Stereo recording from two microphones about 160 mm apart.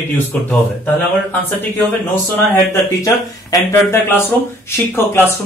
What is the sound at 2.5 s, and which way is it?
Speech, 20° left (ahead or behind).